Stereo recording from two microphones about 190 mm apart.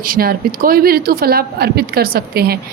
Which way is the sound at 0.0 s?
50° right (ahead or behind).